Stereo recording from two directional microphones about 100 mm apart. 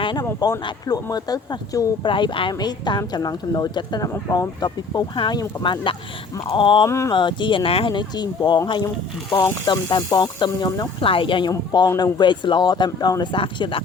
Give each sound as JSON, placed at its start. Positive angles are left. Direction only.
{"t": 0.0, "sound": "speech", "side_deg": 45}
{"t": 2.0, "sound": "speech", "side_deg": 55}
{"t": 6.8, "sound": "a sound", "side_deg": 30}
{"t": 7.1, "sound": "speech", "side_deg": 50}
{"t": 11.0, "sound": "speech", "side_deg": 60}
{"t": 13.3, "sound": "speech", "side_deg": 60}